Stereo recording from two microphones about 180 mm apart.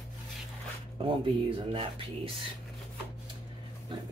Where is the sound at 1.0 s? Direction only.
30° right (ahead or behind).